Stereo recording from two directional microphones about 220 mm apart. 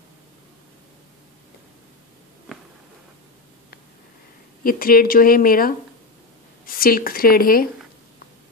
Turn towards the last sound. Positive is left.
turn(degrees=40)  # may be behind; listen again after turning